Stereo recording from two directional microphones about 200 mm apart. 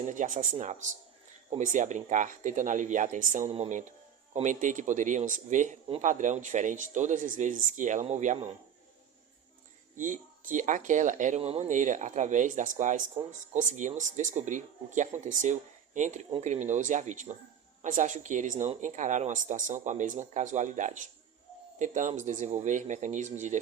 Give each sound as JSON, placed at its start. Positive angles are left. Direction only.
{"t": 0.0, "sound": "speech", "side_deg": -40}
{"t": 9.9, "sound": "speech", "side_deg": -40}